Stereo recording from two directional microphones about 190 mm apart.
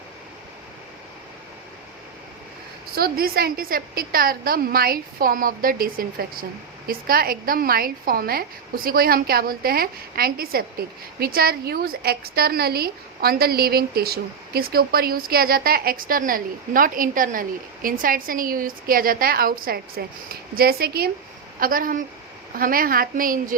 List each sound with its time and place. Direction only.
2.9 s a woman's voice: 55° right (ahead or behind)